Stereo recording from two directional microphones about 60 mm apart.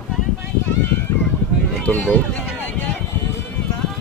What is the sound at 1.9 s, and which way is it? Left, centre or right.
Run, left.